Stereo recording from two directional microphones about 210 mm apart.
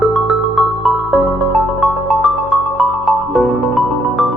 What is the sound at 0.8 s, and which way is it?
Music, centre (ahead or behind).